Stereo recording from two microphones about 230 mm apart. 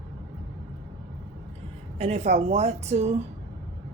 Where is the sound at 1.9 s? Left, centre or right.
Right.